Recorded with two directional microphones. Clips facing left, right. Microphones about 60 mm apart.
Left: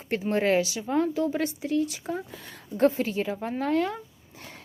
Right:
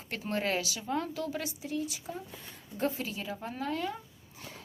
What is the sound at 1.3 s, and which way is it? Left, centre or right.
A woman's voice, left.